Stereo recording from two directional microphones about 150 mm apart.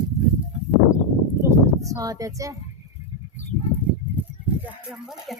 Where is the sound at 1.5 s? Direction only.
20° right (ahead or behind).